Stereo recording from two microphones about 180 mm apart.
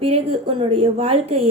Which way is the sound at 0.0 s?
30° right (ahead or behind).